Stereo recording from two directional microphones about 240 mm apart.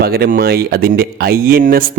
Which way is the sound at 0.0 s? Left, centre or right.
Right.